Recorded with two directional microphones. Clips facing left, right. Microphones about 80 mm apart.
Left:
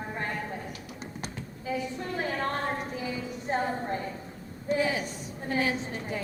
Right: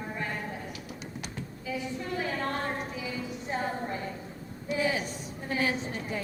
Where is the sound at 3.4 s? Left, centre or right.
Left.